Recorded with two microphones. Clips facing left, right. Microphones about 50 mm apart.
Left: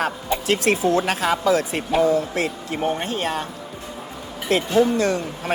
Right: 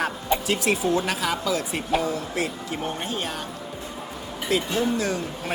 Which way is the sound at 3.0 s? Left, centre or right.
Left.